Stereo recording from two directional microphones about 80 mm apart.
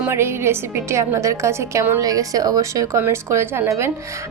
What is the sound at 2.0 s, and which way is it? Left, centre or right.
Speech, right.